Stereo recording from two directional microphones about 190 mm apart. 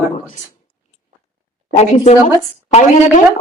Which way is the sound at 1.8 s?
35° left (ahead or behind).